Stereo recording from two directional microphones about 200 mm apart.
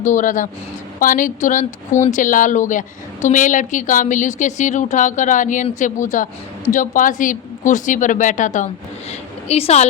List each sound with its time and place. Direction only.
0.0 s speech: 40° left (ahead or behind)